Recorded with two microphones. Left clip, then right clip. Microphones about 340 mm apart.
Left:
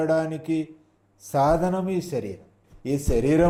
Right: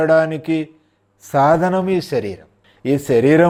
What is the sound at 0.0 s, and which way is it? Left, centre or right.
Speech, right.